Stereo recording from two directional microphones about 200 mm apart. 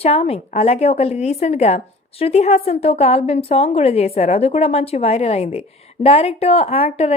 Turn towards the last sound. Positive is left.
turn(degrees=30)  # may be behind; listen again after turning